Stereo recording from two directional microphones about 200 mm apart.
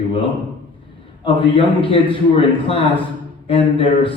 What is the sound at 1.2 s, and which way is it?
A man's voice, 25° left (ahead or behind).